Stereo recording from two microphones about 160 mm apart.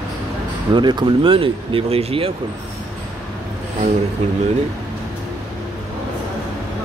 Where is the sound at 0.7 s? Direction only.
30° right (ahead or behind).